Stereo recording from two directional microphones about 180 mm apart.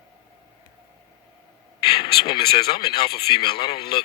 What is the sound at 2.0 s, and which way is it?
Speech, 25° left (ahead or behind).